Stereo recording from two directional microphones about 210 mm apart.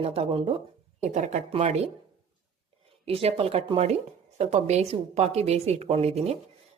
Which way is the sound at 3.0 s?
30° right (ahead or behind).